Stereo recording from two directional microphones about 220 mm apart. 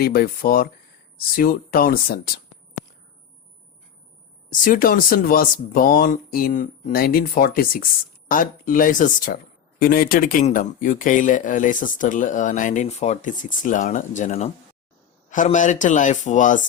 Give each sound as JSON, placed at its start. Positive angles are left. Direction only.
{"t": 0.0, "sound": "speech", "side_deg": 45}
{"t": 4.5, "sound": "speech", "side_deg": 40}